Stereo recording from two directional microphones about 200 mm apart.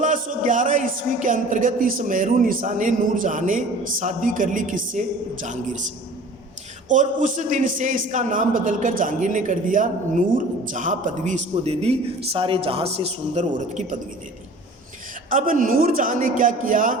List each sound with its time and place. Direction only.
0.0 s a man's voice: 40° right (ahead or behind)
6.8 s a man's voice: 40° right (ahead or behind)
15.3 s a man's voice: 40° right (ahead or behind)